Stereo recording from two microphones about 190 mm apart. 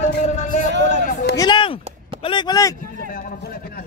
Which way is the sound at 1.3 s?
25° left (ahead or behind).